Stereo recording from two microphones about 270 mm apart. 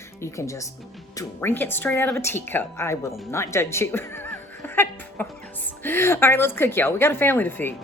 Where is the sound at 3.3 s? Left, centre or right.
Centre.